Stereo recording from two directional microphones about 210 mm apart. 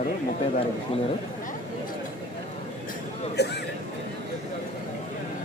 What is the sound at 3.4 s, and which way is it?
Speech, 55° left (ahead or behind).